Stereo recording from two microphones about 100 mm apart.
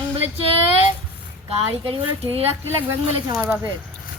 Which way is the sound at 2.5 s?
20° right (ahead or behind).